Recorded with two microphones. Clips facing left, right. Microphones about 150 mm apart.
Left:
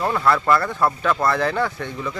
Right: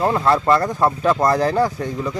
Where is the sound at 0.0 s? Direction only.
30° right (ahead or behind).